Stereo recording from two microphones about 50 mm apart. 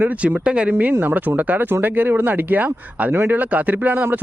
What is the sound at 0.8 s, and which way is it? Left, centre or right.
Speech, right.